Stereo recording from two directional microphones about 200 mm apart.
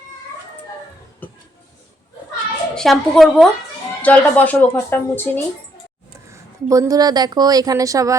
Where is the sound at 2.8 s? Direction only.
Centre (ahead or behind).